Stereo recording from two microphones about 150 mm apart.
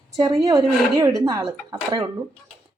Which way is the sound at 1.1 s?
20° right (ahead or behind).